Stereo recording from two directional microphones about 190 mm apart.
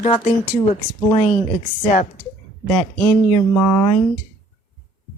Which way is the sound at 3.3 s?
20° left (ahead or behind).